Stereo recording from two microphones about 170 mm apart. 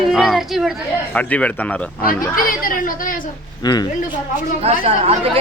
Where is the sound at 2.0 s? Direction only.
55° left (ahead or behind).